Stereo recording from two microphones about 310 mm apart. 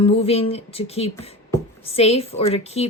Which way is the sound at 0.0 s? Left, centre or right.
Centre.